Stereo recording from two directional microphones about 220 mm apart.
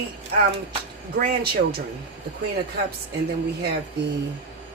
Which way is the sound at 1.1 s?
40° right (ahead or behind).